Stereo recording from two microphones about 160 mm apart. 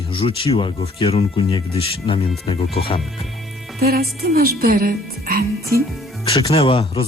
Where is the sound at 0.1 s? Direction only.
35° left (ahead or behind).